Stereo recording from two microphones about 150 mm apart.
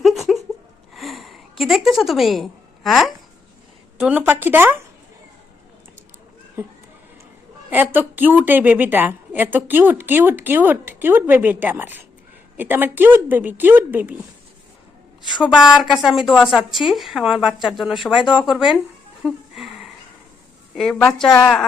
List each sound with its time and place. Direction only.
0.0 s a sound: centre (ahead or behind)
3.9 s a woman's voice: 10° right (ahead or behind)
6.6 s a woman's voice: 20° right (ahead or behind)
15.4 s a woman's voice: 5° right (ahead or behind)
19.2 s a sound: 5° right (ahead or behind)
20.7 s a woman's voice: 5° left (ahead or behind)